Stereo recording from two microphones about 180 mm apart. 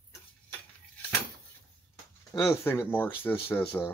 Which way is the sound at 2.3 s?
15° left (ahead or behind).